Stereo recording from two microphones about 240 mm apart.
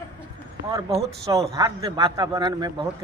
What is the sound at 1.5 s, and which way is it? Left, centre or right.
Speech, centre.